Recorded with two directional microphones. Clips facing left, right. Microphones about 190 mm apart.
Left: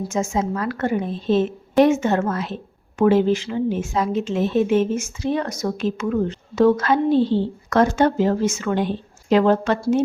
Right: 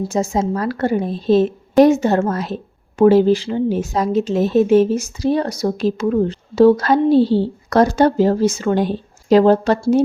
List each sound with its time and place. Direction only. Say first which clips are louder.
0.0 s a woman's voice: right 4 dB; 35° right (ahead or behind)